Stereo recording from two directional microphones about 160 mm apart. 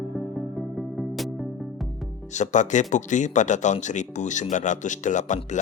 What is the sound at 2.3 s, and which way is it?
Speech, 50° left (ahead or behind).